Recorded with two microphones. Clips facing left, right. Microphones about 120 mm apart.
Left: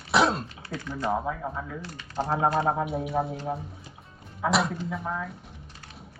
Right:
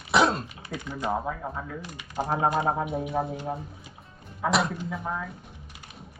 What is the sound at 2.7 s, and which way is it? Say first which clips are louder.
Speech: left 1 dB; centre (ahead or behind).